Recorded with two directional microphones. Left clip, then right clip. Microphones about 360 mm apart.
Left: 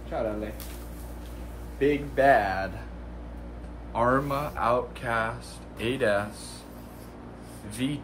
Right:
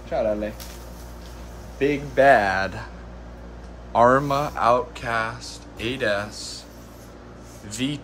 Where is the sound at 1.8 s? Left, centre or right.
Right.